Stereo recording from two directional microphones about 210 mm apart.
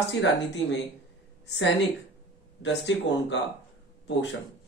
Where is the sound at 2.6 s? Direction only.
60° left (ahead or behind).